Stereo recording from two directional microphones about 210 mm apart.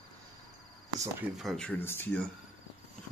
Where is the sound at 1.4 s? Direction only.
Centre (ahead or behind).